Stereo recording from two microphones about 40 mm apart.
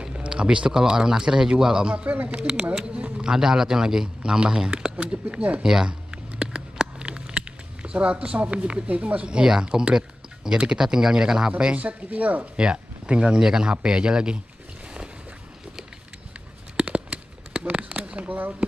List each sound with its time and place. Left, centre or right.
0.0 s speech: right
5.9 s a sound: right
8.4 s speech: right
11.7 s speech: right
12.5 s speech: right
16.7 s a sound: right